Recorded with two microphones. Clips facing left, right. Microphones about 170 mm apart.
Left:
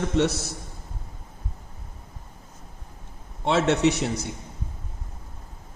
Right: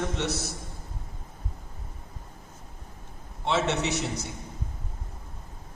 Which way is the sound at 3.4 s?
55° left (ahead or behind).